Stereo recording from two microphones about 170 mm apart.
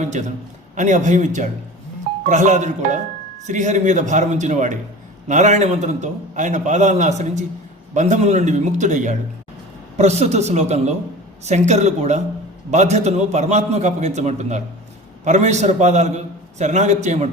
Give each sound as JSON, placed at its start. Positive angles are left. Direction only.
{"t": 0.0, "sound": "a man's voice", "side_deg": -45}